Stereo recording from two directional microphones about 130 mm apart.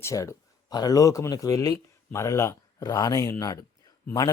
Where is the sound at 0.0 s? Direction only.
25° left (ahead or behind).